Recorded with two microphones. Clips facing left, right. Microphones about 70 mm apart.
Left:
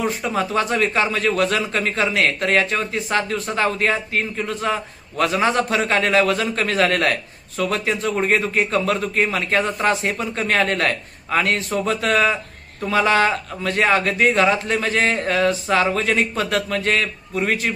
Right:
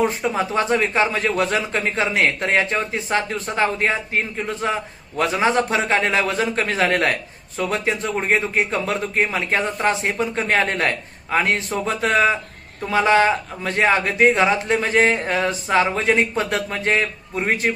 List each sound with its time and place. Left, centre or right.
0.0 s a man's voice: right